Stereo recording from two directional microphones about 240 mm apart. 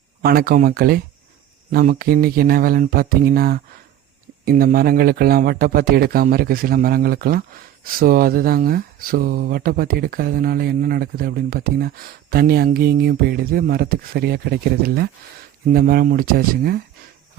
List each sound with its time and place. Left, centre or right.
0.2 s speech: right